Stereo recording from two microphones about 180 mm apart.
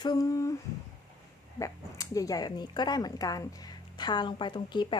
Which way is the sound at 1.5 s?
20° left (ahead or behind).